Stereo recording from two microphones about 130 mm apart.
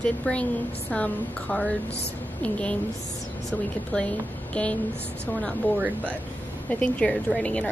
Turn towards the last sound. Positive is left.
turn(degrees=10)  # may be behind; listen again after turning